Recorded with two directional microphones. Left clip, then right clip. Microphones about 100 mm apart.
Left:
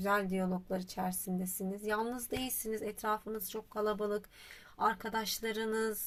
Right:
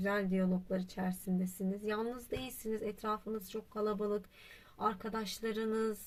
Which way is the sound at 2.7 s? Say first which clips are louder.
Left 1 dB; 35° right (ahead or behind).